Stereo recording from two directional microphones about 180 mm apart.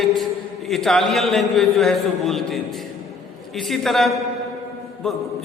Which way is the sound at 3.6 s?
Centre (ahead or behind).